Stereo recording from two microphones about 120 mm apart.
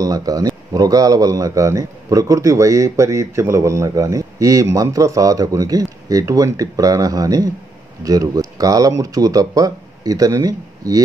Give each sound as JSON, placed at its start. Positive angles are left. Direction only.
{"t": 0.0, "sound": "a man's voice", "side_deg": -30}